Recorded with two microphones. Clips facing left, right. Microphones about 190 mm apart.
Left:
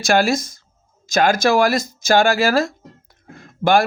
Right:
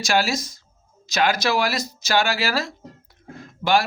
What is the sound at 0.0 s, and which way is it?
Speech, 50° left (ahead or behind).